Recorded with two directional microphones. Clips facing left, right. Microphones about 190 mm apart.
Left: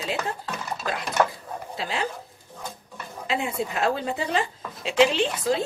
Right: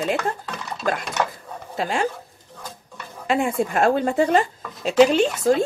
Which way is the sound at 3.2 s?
50° right (ahead or behind).